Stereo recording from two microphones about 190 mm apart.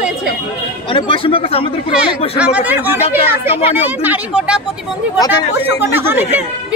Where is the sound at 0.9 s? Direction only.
30° left (ahead or behind).